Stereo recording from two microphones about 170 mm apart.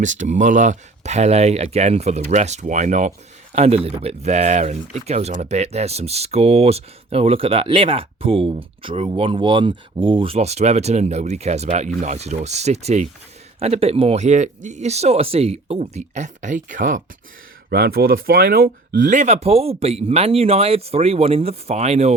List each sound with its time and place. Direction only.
0.0 s a man's voice: 45° right (ahead or behind)
17.7 s speech: 65° right (ahead or behind); by 22.1 s 40° right (ahead or behind)